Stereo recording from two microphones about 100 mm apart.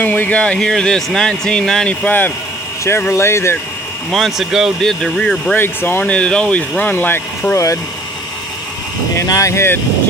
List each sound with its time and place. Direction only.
0.0 s speech: 15° left (ahead or behind)
4.1 s speech: centre (ahead or behind)
5.5 s speech: 20° left (ahead or behind)
6.0 s speech: 10° left (ahead or behind)
7.5 s speech: 30° left (ahead or behind)
9.1 s speech: 35° left (ahead or behind)